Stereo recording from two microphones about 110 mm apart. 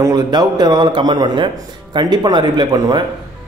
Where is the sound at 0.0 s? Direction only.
40° right (ahead or behind).